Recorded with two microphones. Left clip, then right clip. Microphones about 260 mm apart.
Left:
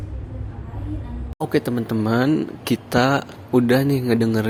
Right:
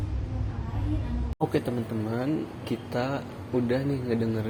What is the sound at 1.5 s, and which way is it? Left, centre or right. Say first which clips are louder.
A man's voice: left 7 dB; left.